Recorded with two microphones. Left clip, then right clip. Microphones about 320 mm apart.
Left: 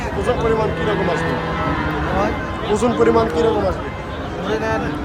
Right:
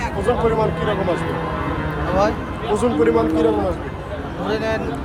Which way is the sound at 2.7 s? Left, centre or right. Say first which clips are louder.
Left 2 dB; centre.